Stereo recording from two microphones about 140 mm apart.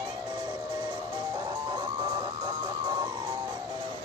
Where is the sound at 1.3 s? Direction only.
30° right (ahead or behind).